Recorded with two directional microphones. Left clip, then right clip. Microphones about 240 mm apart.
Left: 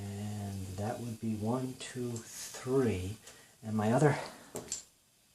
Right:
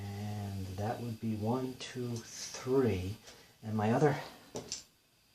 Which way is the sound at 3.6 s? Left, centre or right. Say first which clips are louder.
Left 1 dB; left.